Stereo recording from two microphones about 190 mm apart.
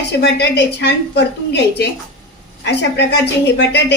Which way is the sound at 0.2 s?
60° left (ahead or behind).